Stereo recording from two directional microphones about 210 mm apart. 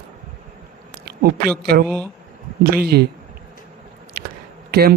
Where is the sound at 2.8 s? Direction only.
50° right (ahead or behind).